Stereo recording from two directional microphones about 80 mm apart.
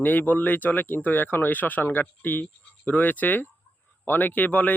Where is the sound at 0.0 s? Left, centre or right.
Left.